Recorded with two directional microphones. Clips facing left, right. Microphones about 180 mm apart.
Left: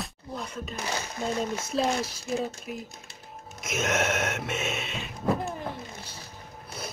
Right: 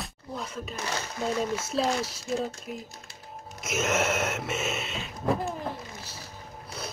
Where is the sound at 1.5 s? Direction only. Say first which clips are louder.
Even; 5° right (ahead or behind).